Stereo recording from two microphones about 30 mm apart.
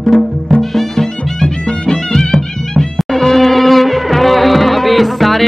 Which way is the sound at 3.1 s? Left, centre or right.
Centre.